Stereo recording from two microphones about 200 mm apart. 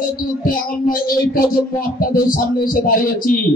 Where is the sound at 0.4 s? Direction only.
45° left (ahead or behind).